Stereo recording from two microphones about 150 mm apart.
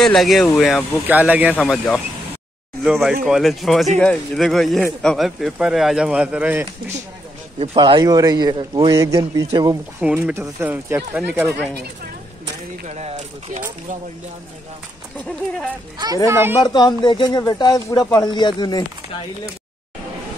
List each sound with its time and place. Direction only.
0.0 s speech: centre (ahead or behind)
1.0 s speech: 10° right (ahead or behind)
1.6 s speech: 5° left (ahead or behind); by 6.7 s 10° right (ahead or behind)
7.7 s speech: 30° right (ahead or behind)
10.0 s speech: 10° right (ahead or behind)
12.8 s speech: 50° right (ahead or behind)
15.2 s speech: 5° left (ahead or behind)
16.3 s speech: 15° right (ahead or behind)
16.5 s speech: 30° left (ahead or behind)